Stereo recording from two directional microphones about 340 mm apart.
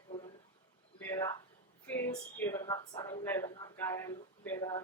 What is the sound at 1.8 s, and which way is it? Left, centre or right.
Speech, centre.